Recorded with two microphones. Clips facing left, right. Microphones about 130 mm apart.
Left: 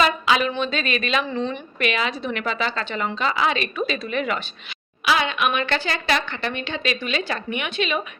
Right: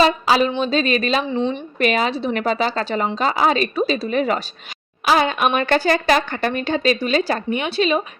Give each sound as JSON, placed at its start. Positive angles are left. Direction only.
{"t": 0.0, "sound": "a woman's voice", "side_deg": -35}
{"t": 1.2, "sound": "speech", "side_deg": -20}
{"t": 1.8, "sound": "a woman's voice", "side_deg": -40}